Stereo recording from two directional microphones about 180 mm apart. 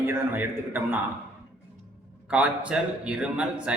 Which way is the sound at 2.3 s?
5° right (ahead or behind).